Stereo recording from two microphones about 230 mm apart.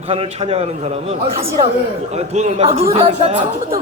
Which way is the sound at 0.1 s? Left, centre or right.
Right.